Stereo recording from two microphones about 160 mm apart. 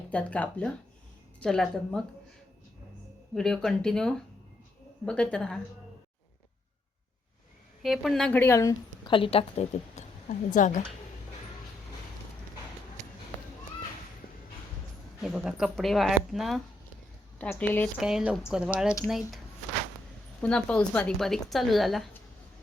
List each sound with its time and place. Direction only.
0.1 s a woman's voice: 10° left (ahead or behind)
3.3 s a woman's voice: 5° left (ahead or behind)
7.8 s a woman's voice: centre (ahead or behind); by 8.7 s 15° left (ahead or behind)
9.0 s a woman's voice: 35° left (ahead or behind); by 10.8 s 50° left (ahead or behind)
15.2 s a woman's voice: 5° right (ahead or behind)
17.9 s speech: 5° right (ahead or behind)
20.4 s speech: 5° left (ahead or behind)